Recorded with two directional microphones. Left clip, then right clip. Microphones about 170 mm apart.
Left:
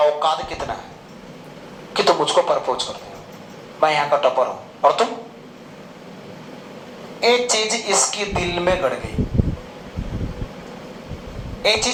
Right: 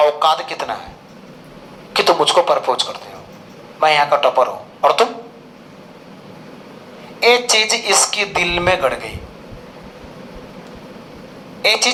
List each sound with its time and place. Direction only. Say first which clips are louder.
0.0 s speech: right 4 dB; 35° right (ahead or behind)
1.9 s speech: right 3 dB; 35° right (ahead or behind)
7.2 s speech: right 4 dB; 35° right (ahead or behind)
11.6 s speech: right 3 dB; 35° right (ahead or behind)